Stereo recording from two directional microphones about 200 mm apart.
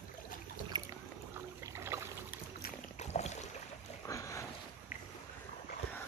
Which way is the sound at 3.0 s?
35° left (ahead or behind).